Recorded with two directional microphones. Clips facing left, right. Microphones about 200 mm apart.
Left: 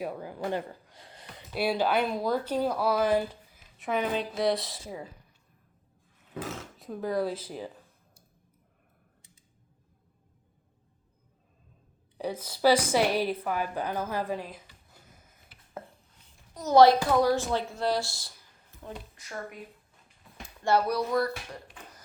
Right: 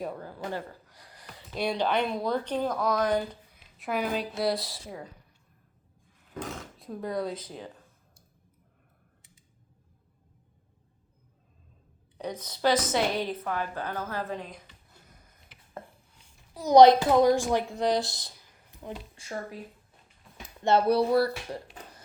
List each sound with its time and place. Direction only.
0.0 s speech: 10° left (ahead or behind); by 1.5 s 25° left (ahead or behind)
1.5 s speech: 5° left (ahead or behind)
6.3 s speech: 5° left (ahead or behind)
12.1 s a woman's voice: 5° left (ahead or behind)
16.6 s speech: 15° right (ahead or behind)
20.2 s a sound: centre (ahead or behind)
20.7 s speech: 25° right (ahead or behind)